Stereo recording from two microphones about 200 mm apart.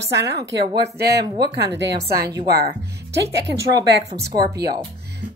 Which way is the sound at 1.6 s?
55° right (ahead or behind).